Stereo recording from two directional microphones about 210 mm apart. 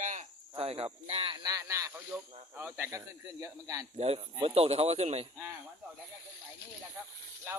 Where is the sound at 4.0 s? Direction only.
30° right (ahead or behind).